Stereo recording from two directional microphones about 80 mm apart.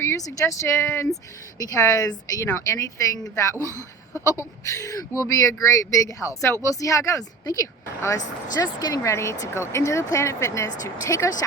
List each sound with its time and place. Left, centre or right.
0.2 s speech: left
1.5 s speech: left
2.5 s speech: left